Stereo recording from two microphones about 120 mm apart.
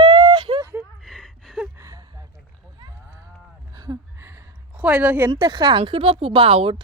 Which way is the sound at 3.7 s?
30° right (ahead or behind).